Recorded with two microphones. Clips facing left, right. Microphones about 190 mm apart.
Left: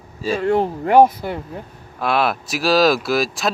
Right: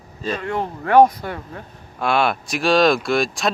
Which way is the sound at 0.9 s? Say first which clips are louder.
Even; 10° left (ahead or behind).